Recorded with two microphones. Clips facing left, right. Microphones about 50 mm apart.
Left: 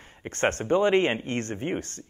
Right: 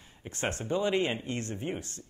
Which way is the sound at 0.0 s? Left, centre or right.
Left.